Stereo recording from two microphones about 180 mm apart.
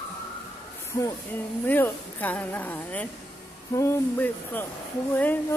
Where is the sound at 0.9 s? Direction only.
15° left (ahead or behind).